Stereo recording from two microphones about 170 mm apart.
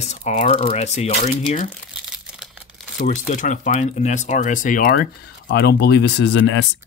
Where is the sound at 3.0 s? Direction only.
45° left (ahead or behind).